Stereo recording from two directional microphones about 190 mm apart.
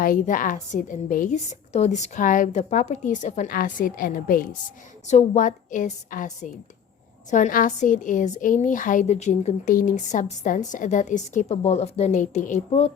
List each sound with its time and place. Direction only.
0.0 s a woman's voice: 45° left (ahead or behind)
5.0 s a woman's voice: 40° left (ahead or behind)